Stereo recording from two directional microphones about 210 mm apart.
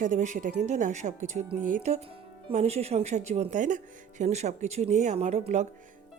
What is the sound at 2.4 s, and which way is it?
A woman's voice, 30° right (ahead or behind).